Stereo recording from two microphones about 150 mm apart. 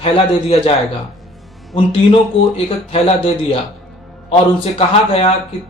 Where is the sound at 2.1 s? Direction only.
40° left (ahead or behind).